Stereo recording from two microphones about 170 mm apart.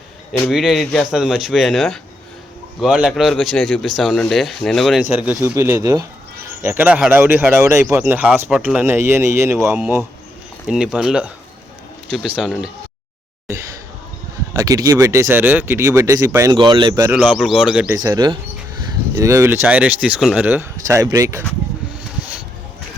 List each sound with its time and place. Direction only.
0.5 s speech: centre (ahead or behind); by 9.8 s 15° right (ahead or behind)
10.7 s speech: 5° right (ahead or behind)
12.4 s speech: centre (ahead or behind)
14.6 s speech: 20° right (ahead or behind)
17.2 s speech: 5° right (ahead or behind)
17.9 s speech: 20° right (ahead or behind)